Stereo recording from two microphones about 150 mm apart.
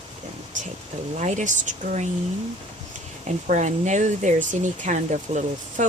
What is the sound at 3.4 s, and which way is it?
Speech, 55° right (ahead or behind).